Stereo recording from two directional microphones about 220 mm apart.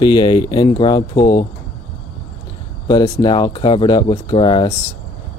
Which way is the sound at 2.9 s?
20° left (ahead or behind).